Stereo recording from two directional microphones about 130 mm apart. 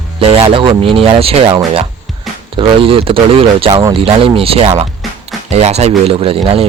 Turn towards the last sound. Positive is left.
turn(degrees=-45)  # may be behind; listen again after turning